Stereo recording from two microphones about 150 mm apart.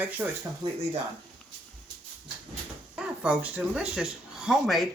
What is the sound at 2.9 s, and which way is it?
Speech, 5° right (ahead or behind).